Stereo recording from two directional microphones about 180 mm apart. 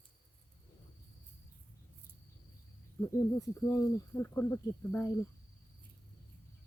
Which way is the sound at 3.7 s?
15° left (ahead or behind).